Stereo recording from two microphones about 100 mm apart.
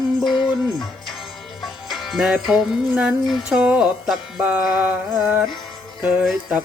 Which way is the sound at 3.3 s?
5° right (ahead or behind).